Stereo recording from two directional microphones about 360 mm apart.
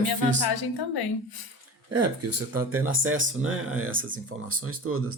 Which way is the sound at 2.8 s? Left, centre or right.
Right.